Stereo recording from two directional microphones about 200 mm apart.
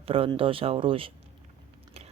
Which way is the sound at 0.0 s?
30° right (ahead or behind).